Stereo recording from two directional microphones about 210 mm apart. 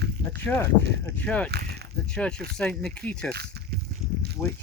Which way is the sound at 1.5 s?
50° right (ahead or behind).